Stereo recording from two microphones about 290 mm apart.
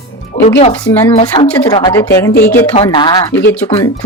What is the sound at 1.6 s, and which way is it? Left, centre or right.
A woman's voice, centre.